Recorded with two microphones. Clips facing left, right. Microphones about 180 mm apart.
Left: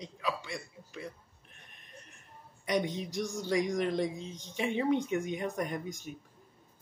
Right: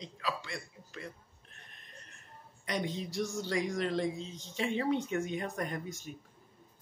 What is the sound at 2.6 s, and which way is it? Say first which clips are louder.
Speech: left 4 dB; 15° left (ahead or behind).